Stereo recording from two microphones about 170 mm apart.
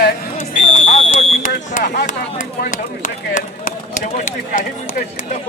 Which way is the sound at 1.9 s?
70° left (ahead or behind).